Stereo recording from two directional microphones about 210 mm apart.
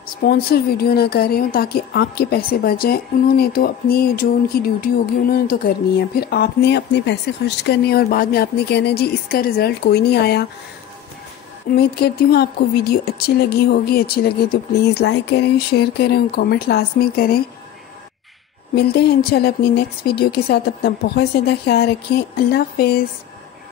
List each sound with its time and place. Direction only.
0.2 s speech: 50° left (ahead or behind)
11.7 s speech: 50° left (ahead or behind)
18.8 s speech: 50° left (ahead or behind)